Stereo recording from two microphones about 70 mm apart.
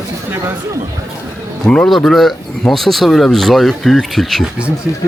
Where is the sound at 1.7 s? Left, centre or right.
Centre.